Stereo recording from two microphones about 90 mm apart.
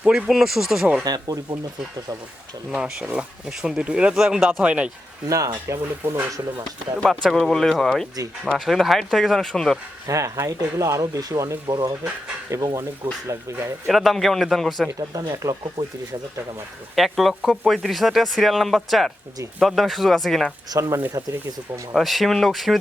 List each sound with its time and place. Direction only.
0.0 s speech: 10° right (ahead or behind)
1.0 s speech: 45° right (ahead or behind)
2.7 s speech: 15° right (ahead or behind)
5.6 s speech: 30° right (ahead or behind)
7.0 s speech: centre (ahead or behind)
10.1 s speech: 35° right (ahead or behind)
13.8 s speech: centre (ahead or behind)
15.1 s speech: 40° right (ahead or behind)
16.9 s speech: centre (ahead or behind)
20.7 s speech: 35° right (ahead or behind)
21.1 s speech: 45° right (ahead or behind)
21.9 s speech: centre (ahead or behind)